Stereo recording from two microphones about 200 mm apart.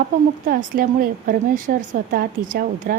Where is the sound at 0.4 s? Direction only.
45° right (ahead or behind).